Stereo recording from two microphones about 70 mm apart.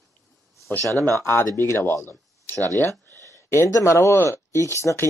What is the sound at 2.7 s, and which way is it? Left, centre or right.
Speech, right.